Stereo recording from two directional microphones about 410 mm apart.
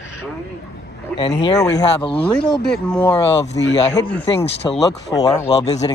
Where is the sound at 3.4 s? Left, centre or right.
Left.